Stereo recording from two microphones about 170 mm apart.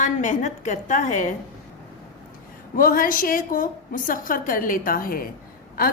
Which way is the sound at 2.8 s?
55° left (ahead or behind).